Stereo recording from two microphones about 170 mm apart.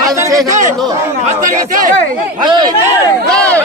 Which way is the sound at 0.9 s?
15° right (ahead or behind).